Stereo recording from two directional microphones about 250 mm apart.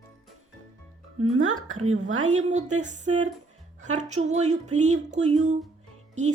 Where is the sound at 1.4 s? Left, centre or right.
Right.